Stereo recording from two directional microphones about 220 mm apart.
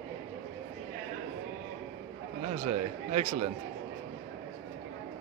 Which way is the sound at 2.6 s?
30° right (ahead or behind).